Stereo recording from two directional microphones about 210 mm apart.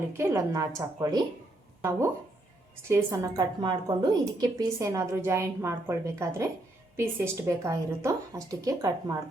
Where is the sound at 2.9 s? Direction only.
15° right (ahead or behind).